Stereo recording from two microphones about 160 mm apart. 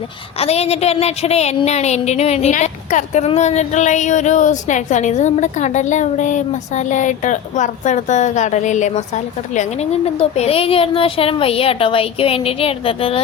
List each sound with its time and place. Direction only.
0.3 s a woman's voice: 40° left (ahead or behind)